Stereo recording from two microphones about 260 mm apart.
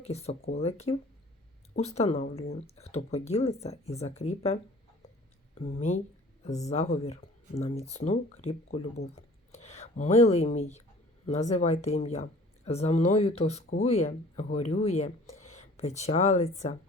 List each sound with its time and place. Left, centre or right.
0.0 s speech: left
9.5 s a sound: left
11.3 s speech: left